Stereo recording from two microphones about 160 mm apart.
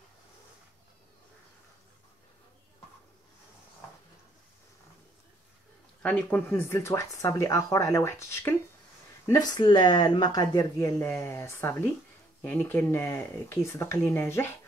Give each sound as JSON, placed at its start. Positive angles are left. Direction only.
{"t": 6.0, "sound": "speech", "side_deg": 10}
{"t": 9.3, "sound": "speech", "side_deg": 25}